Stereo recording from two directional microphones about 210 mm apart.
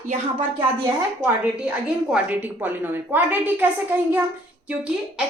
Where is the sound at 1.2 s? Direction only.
10° right (ahead or behind).